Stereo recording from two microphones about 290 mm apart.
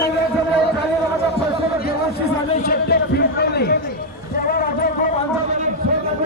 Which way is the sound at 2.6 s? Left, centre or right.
Left.